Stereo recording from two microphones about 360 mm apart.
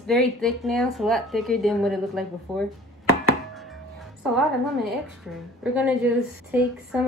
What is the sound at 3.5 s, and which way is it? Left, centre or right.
Music, centre.